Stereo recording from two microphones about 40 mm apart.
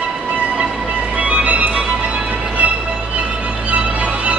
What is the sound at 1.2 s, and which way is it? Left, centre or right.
Music, right.